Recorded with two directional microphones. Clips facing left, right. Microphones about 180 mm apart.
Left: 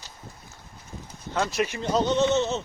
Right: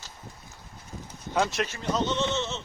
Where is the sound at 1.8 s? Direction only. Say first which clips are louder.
Left 5 dB; 40° left (ahead or behind).